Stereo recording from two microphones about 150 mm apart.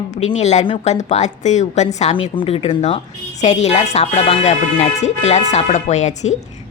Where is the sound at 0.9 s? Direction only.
50° left (ahead or behind).